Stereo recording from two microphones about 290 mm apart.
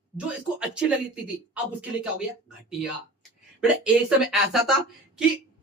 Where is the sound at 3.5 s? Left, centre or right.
Centre.